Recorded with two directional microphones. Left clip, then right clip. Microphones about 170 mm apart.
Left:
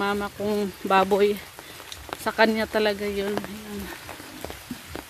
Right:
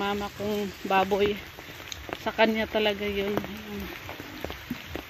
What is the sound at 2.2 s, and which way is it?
Speech, 25° left (ahead or behind).